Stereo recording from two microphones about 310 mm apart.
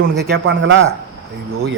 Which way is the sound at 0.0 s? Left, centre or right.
Right.